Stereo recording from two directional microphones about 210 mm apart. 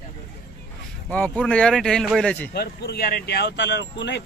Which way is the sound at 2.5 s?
50° left (ahead or behind).